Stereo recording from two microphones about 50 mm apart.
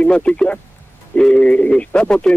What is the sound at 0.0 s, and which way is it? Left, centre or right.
Speech, left.